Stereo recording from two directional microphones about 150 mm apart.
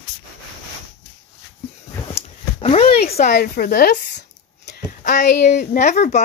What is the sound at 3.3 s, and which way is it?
Speech, 90° left.